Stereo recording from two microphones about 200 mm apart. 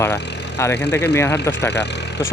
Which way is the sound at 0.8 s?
55° left (ahead or behind).